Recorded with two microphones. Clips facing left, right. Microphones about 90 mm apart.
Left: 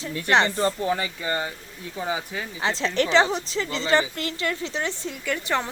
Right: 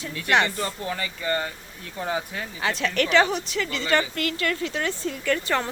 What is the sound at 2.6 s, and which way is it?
Speech, 25° left (ahead or behind).